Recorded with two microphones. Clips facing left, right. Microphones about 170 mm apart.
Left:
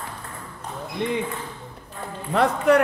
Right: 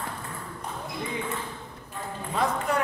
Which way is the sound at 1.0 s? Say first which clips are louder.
Left 10 dB; 75° left (ahead or behind).